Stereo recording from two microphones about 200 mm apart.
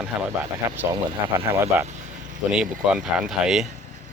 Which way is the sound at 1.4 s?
35° right (ahead or behind).